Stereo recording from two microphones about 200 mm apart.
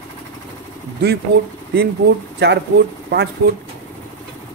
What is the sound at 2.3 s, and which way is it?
Speech, 55° right (ahead or behind).